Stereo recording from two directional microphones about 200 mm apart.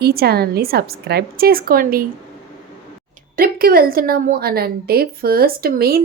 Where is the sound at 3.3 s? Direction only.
50° right (ahead or behind).